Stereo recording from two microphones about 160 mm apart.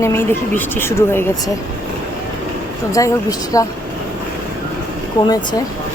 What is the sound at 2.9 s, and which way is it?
Speech, 20° left (ahead or behind).